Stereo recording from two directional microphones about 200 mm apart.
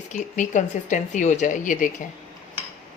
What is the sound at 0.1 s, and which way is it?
Speech, 40° left (ahead or behind).